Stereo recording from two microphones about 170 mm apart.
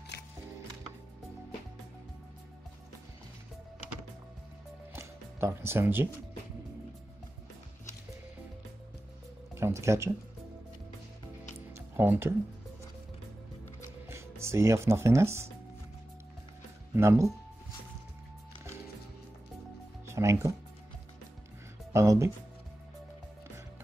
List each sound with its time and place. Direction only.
4.9 s music: 15° right (ahead or behind)
9.6 s speech: 15° right (ahead or behind)
11.7 s music: 15° right (ahead or behind)
14.0 s speech: 15° right (ahead or behind)
16.9 s speech: 15° right (ahead or behind)
20.1 s speech: 15° right (ahead or behind)
21.9 s speech: 20° right (ahead or behind)